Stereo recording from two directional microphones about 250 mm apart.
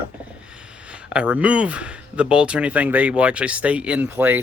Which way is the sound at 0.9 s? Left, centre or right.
Centre.